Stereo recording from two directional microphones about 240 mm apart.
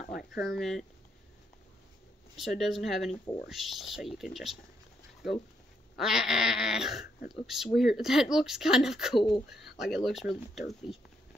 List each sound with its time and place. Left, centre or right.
0.0 s a sound: left
0.5 s speech: centre
2.3 s speech: centre
9.1 s speech: left
9.5 s speech: centre